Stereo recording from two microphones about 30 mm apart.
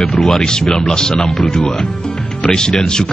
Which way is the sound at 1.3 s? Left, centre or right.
Centre.